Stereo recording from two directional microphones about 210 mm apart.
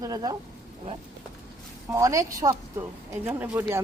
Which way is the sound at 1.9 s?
15° right (ahead or behind).